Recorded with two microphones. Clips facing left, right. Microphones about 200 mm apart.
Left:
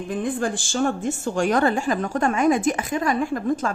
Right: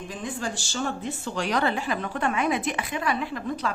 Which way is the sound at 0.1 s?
55° left (ahead or behind).